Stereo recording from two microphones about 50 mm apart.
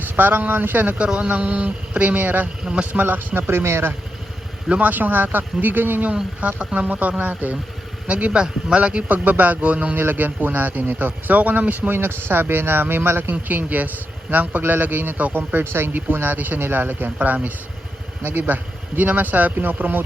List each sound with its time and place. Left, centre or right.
0.0 s a man's voice: right
0.9 s speech: right
2.6 s speech: right
3.0 s speech: right
4.7 s a man's voice: right
6.6 s speech: right
6.8 s a man's voice: right
8.0 s speech: right
9.1 s a man's voice: right
10.0 s a man's voice: right
11.9 s speech: right
13.6 s a man's voice: right
18.2 s a man's voice: right